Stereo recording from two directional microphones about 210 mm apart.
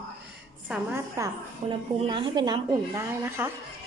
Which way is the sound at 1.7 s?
25° right (ahead or behind).